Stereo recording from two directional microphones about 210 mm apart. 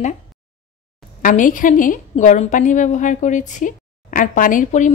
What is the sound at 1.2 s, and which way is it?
A woman's voice, 40° left (ahead or behind).